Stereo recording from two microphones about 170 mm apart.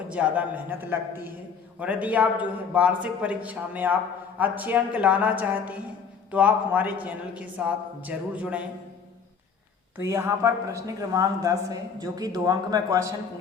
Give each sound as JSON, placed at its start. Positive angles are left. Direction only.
{"t": 0.1, "sound": "a man's voice", "side_deg": -10}
{"t": 10.0, "sound": "speech", "side_deg": -15}